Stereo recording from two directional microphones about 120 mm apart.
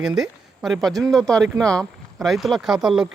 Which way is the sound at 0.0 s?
5° right (ahead or behind).